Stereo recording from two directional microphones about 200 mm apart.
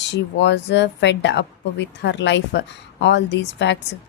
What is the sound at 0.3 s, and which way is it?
Speech, 60° left (ahead or behind).